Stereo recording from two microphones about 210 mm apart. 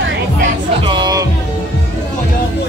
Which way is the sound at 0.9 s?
20° right (ahead or behind).